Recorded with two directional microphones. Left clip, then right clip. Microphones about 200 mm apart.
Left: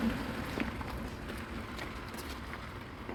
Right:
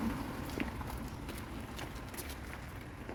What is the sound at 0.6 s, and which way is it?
Vehicle, 45° left (ahead or behind).